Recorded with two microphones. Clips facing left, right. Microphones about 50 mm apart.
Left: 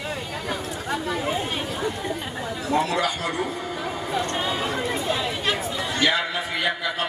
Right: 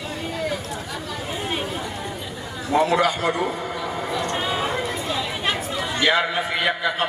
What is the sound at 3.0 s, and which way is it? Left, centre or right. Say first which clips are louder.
Speech: right 4 dB; right.